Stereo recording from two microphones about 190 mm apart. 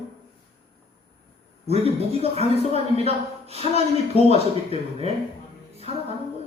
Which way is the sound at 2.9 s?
35° right (ahead or behind).